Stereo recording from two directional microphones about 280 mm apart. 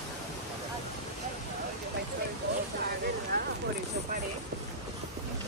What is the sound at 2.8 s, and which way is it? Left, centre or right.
Vehicle, right.